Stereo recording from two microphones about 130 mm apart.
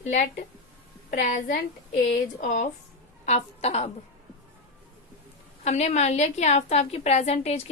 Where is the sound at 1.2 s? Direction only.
80° left.